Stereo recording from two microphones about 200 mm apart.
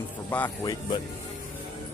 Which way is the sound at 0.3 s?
10° left (ahead or behind).